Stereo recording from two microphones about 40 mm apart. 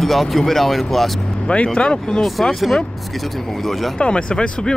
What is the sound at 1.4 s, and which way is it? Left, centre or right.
Speech, left.